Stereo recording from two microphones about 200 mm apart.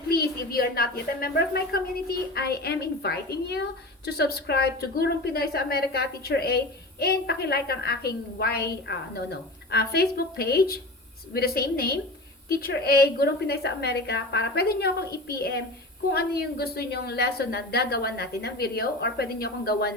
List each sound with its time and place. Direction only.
0.1 s a woman's voice: 50° left (ahead or behind)